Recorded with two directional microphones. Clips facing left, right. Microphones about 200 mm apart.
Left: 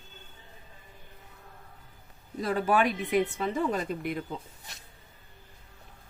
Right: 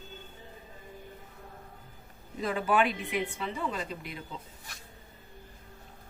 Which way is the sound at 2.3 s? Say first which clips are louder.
Left 2 dB; 40° left (ahead or behind).